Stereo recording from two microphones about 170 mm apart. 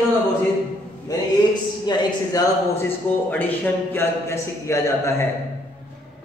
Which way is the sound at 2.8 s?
10° left (ahead or behind).